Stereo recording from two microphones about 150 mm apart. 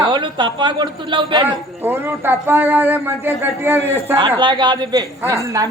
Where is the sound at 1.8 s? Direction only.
15° right (ahead or behind).